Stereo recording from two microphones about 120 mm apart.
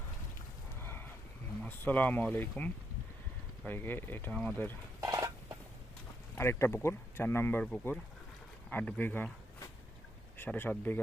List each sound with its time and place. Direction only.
0.8 s a sound: 20° left (ahead or behind)
1.6 s speech: 15° left (ahead or behind)
4.9 s a sound: 30° right (ahead or behind)
6.3 s speech: 20° left (ahead or behind)
7.6 s speech: 10° left (ahead or behind)
10.3 s speech: 15° left (ahead or behind)